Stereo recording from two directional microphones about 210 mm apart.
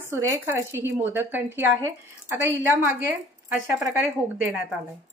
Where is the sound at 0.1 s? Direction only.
15° right (ahead or behind).